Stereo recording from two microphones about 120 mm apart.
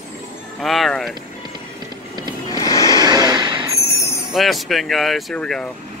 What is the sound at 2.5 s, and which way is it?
Music, 30° left (ahead or behind).